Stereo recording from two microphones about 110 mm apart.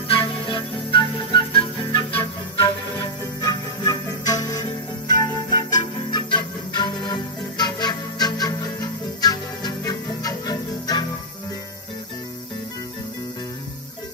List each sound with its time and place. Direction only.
0.1 s music: 50° left (ahead or behind)